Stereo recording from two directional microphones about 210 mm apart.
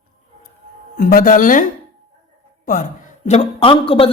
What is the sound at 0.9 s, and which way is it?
Speech, 40° left (ahead or behind).